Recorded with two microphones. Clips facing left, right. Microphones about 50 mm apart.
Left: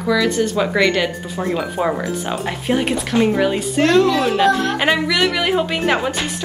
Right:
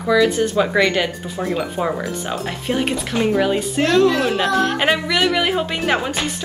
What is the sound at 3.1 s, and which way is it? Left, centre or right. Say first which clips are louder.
Speech: left 3 dB; left.